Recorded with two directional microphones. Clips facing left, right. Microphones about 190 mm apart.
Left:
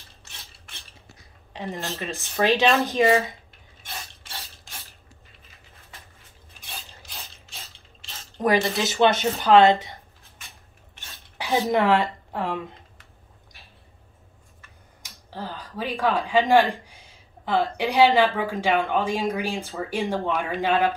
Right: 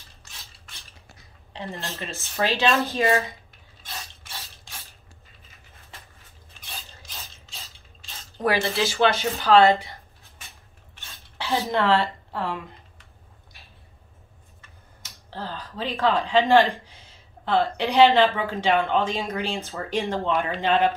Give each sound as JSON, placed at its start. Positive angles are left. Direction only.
{"t": 1.5, "sound": "speech", "side_deg": 15}
{"t": 8.4, "sound": "speech", "side_deg": 15}
{"t": 11.0, "sound": "a sound", "side_deg": 15}
{"t": 15.0, "sound": "speech", "side_deg": 15}